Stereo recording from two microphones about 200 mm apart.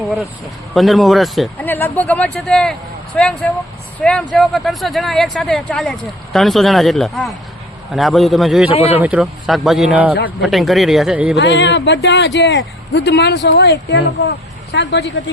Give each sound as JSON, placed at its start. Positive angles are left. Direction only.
{"t": 0.7, "sound": "speech", "side_deg": 0}
{"t": 11.3, "sound": "speech", "side_deg": 60}